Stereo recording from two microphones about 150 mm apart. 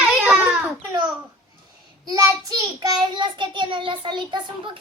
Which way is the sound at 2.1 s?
25° right (ahead or behind).